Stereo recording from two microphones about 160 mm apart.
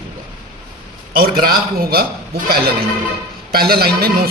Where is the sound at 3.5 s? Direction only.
75° right (ahead or behind).